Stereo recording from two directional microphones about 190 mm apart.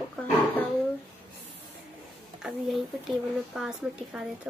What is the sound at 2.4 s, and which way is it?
Speech, centre (ahead or behind).